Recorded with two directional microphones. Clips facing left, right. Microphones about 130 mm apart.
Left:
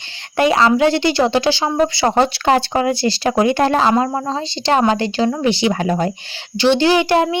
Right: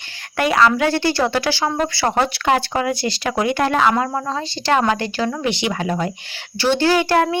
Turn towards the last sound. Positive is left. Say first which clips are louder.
# left 2 dB
turn(degrees=20)  # may be behind; listen again after turning